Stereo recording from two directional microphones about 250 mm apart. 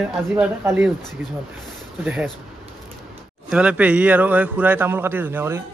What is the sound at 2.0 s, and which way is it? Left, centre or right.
Speech, centre.